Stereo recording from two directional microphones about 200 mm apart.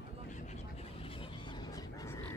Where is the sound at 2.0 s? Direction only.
15° left (ahead or behind).